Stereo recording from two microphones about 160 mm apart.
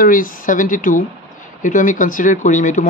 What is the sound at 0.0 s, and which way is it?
Speech, 60° left (ahead or behind).